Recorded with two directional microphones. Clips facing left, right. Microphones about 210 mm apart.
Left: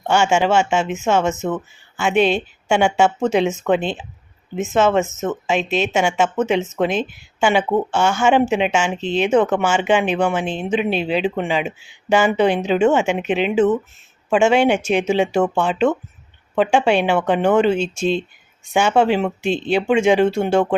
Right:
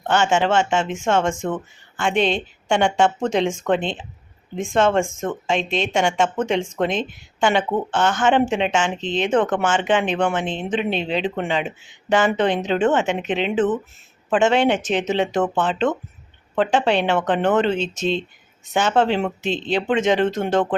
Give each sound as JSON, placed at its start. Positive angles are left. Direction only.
{"t": 0.1, "sound": "speech", "side_deg": 10}